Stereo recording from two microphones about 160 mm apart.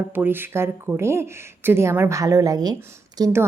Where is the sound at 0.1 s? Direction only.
10° right (ahead or behind).